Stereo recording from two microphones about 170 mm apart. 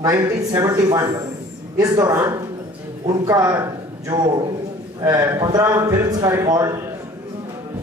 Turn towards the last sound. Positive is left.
turn(degrees=-20)  # may be behind; listen again after turning